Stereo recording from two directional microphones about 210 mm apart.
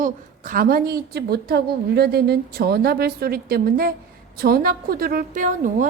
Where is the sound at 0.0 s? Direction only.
40° right (ahead or behind).